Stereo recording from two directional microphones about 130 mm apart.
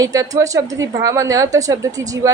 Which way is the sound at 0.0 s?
25° right (ahead or behind).